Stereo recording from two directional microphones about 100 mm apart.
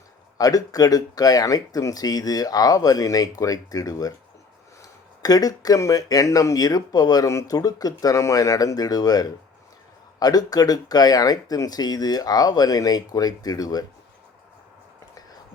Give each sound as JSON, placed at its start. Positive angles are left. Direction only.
{"t": 0.3, "sound": "speech", "side_deg": 40}